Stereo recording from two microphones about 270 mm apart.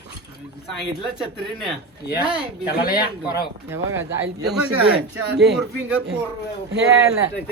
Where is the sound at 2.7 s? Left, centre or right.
Left.